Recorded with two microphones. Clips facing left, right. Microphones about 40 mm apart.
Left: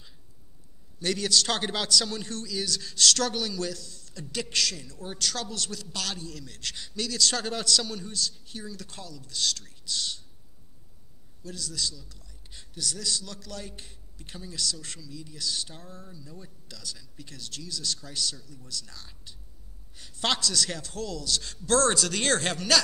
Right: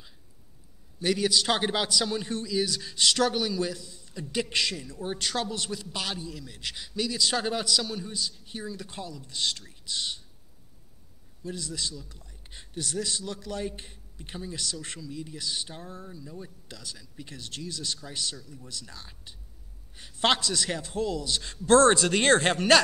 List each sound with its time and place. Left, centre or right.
1.0 s a man's voice: centre
11.4 s a man's voice: right